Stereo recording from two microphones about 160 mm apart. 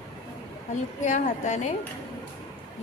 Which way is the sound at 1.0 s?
50° left (ahead or behind).